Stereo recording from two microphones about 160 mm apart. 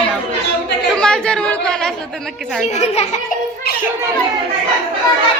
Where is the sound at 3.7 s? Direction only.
90° left.